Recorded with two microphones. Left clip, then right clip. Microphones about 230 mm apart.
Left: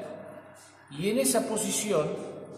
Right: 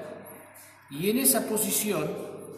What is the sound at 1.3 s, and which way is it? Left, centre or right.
Speech, centre.